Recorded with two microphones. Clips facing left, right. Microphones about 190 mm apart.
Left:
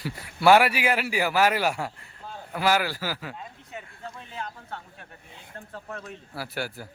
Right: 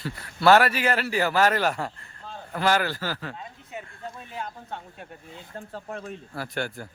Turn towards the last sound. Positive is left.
turn(degrees=5)  # may be behind; listen again after turning